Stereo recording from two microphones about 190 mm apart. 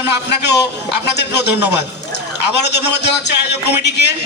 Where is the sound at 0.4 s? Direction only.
65° left (ahead or behind).